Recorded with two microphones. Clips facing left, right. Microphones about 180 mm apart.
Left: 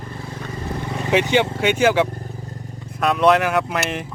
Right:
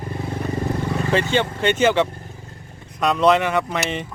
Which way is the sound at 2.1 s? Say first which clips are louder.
Left 6 dB; 35° left (ahead or behind).